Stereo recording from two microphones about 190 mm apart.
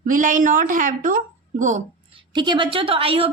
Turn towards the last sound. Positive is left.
turn(degrees=-30)  # may be behind; listen again after turning